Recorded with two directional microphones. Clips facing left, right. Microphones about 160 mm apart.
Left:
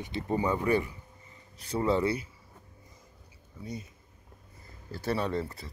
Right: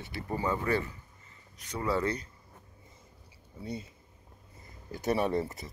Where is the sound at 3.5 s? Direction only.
30° right (ahead or behind).